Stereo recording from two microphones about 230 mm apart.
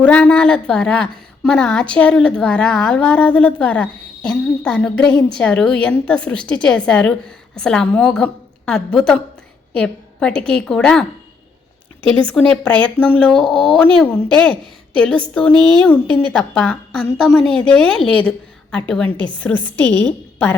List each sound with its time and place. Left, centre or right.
0.0 s a woman's voice: centre
12.2 s a woman's voice: centre
15.5 s a woman's voice: centre
15.8 s a woman's voice: centre
19.1 s a woman's voice: right
19.4 s a woman's voice: centre